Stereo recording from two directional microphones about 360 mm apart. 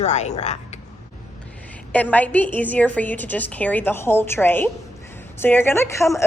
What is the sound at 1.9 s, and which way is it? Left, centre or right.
A woman's voice, centre.